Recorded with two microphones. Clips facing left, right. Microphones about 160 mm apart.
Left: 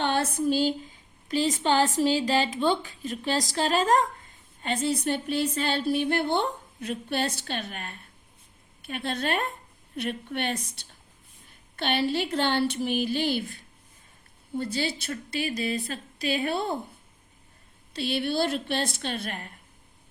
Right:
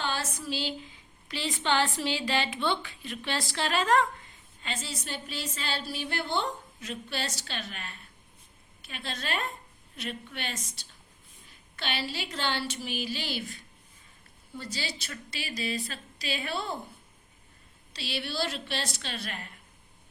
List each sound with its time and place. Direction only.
0.0 s a sound: 60° left (ahead or behind)
0.3 s a woman's voice: 50° left (ahead or behind)
4.6 s a woman's voice: 55° left (ahead or behind)
14.5 s a woman's voice: 55° left (ahead or behind)
17.9 s a woman's voice: 55° left (ahead or behind)